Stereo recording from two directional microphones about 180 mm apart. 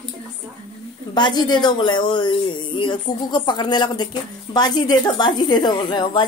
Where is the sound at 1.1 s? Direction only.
25° left (ahead or behind).